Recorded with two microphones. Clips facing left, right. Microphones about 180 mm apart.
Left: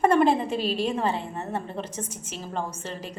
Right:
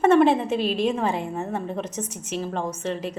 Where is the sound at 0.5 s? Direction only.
35° left (ahead or behind).